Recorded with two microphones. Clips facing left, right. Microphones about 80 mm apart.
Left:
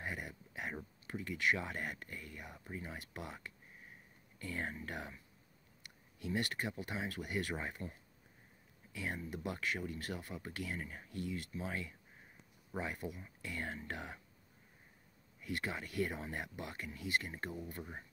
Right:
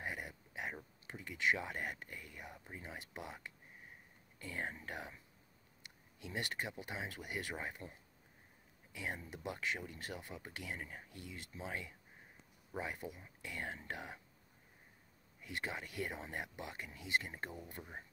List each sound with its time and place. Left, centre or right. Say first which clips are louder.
0.0 s a sound: left 1 dB; centre
1.2 s speech: left 1 dB; centre
8.9 s speech: left 3 dB; centre
11.2 s speech: left 4 dB; centre
15.4 s speech: left 2 dB; centre
16.5 s speech: left 2 dB; centre